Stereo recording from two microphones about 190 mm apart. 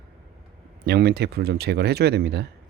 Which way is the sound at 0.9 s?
60° right (ahead or behind).